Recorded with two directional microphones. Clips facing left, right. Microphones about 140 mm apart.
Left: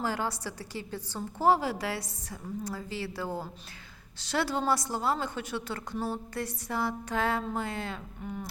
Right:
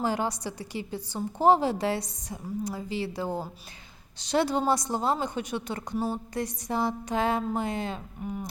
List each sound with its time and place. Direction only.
0.0 s a woman's voice: 20° right (ahead or behind)